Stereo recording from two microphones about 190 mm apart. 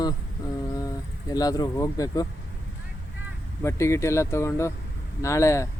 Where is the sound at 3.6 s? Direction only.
15° left (ahead or behind).